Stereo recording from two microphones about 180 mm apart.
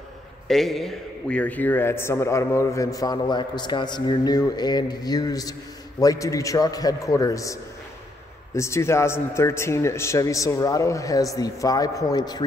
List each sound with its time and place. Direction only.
0.5 s a man's voice: centre (ahead or behind); by 7.5 s 20° left (ahead or behind)
8.5 s a man's voice: 15° left (ahead or behind)